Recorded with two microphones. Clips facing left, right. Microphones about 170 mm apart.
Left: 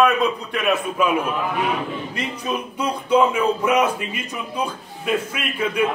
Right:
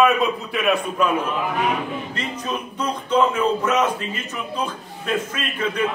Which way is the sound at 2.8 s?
10° left (ahead or behind).